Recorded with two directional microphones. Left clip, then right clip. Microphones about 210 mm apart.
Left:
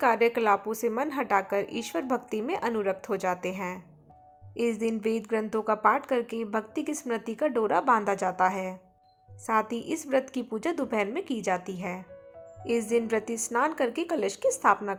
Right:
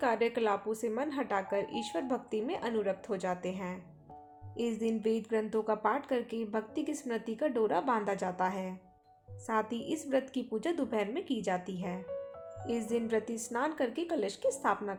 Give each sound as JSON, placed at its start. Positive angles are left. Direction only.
{"t": 0.0, "sound": "a woman's voice", "side_deg": 20}